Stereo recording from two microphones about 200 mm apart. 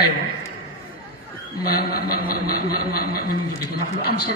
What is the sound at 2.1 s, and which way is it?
A man's voice, 50° left (ahead or behind).